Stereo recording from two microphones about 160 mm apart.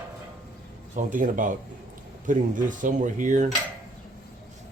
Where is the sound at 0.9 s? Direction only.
55° right (ahead or behind).